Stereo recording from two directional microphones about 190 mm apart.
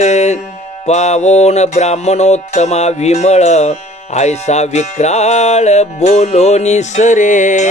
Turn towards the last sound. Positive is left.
turn(degrees=40)  # may be behind; listen again after turning